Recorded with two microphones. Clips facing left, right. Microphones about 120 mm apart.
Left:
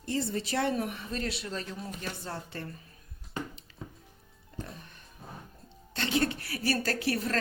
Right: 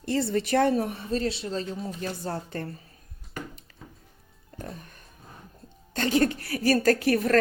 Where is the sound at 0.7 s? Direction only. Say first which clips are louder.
Right 6 dB; 35° right (ahead or behind).